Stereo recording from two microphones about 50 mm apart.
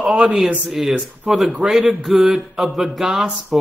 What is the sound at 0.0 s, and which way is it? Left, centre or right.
Speech, right.